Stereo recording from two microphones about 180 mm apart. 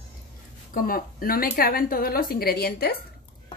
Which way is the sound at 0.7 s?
50° left (ahead or behind).